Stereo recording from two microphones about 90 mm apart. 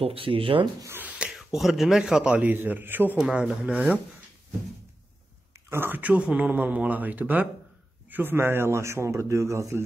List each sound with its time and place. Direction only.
0.0 s speech: 90° right
0.9 s speech: 15° right (ahead or behind)
3.2 s speech: 10° right (ahead or behind)
5.7 s a man's voice: 25° right (ahead or behind)